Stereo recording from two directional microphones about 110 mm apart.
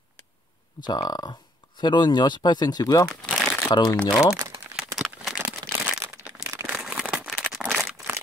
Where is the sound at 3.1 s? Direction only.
5° left (ahead or behind).